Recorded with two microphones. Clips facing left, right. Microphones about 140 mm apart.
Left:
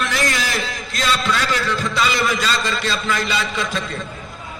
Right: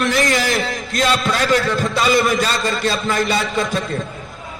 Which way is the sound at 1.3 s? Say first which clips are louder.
Right 4 dB; 45° right (ahead or behind).